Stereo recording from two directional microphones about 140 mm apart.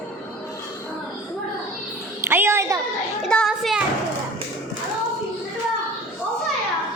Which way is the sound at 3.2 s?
5° left (ahead or behind).